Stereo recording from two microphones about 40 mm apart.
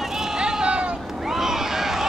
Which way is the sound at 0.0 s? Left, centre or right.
Centre.